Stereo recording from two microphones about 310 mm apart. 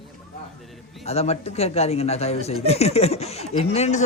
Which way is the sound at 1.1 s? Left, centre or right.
Centre.